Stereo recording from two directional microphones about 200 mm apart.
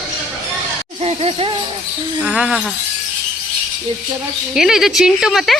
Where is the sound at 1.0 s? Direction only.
30° right (ahead or behind).